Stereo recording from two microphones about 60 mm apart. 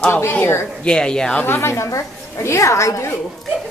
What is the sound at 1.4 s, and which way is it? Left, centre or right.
A woman's voice, left.